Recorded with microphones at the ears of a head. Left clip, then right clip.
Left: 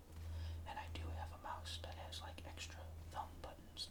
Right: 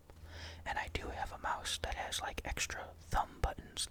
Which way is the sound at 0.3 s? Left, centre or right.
Right.